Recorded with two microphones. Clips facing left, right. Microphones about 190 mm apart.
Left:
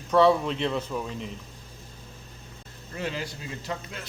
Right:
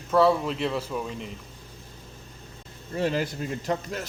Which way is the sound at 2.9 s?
45° right (ahead or behind).